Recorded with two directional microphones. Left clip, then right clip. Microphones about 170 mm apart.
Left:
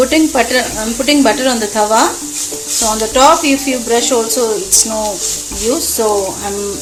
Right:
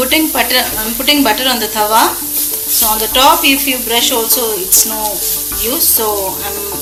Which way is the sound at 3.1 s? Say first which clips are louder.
Even; 50° left (ahead or behind).